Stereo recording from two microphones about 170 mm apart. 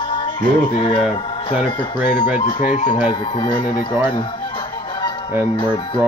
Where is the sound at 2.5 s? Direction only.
50° left (ahead or behind).